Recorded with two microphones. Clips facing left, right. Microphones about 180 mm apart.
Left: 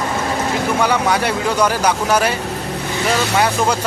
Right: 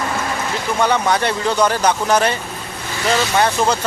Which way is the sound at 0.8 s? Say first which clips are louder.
Right 2 dB; 10° left (ahead or behind).